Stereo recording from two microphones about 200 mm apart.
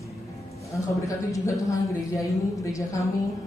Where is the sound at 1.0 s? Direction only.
15° left (ahead or behind).